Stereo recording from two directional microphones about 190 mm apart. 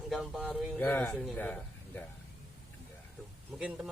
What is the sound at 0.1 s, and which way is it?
Speech, centre (ahead or behind).